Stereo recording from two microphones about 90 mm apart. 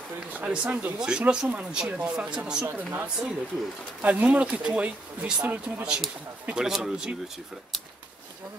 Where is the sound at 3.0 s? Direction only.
10° right (ahead or behind).